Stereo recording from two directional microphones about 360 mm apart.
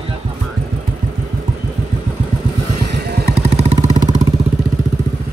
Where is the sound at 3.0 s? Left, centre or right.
Right.